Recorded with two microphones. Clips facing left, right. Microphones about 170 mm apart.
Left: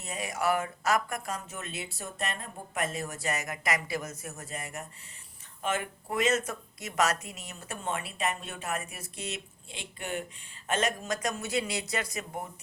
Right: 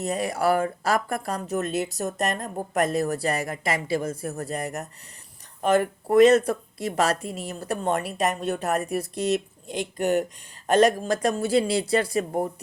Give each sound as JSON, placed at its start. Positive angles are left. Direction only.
{"t": 0.0, "sound": "speech", "side_deg": -35}